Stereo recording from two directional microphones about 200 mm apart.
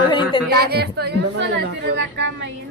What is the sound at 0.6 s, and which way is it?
Speech, 50° right (ahead or behind).